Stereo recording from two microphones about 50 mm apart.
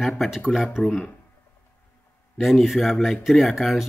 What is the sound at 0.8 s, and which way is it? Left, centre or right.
Speech, left.